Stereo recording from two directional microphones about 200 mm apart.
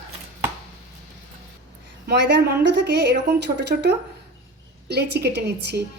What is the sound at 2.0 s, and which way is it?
A woman's voice, 60° right (ahead or behind).